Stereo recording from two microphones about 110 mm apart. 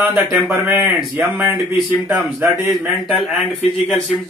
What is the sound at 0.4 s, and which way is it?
Speech, 15° right (ahead or behind).